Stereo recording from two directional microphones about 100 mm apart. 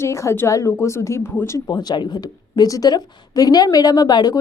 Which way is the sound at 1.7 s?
45° left (ahead or behind).